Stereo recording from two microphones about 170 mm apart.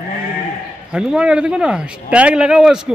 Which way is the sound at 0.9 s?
5° right (ahead or behind).